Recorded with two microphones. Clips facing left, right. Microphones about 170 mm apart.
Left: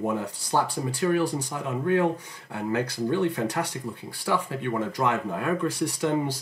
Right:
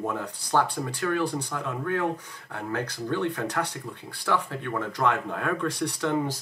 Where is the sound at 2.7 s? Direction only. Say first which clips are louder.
Left 4 dB; 15° left (ahead or behind).